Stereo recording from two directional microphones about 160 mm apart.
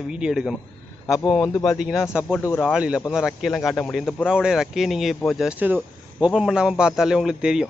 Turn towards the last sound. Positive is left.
turn(degrees=-5)  # may be behind; listen again after turning